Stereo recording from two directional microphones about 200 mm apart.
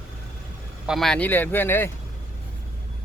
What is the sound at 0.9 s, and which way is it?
Speech, centre (ahead or behind).